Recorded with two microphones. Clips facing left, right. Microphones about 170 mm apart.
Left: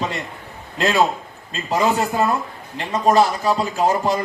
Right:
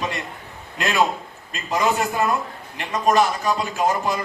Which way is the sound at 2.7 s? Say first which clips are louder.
Left 3 dB; 30° left (ahead or behind).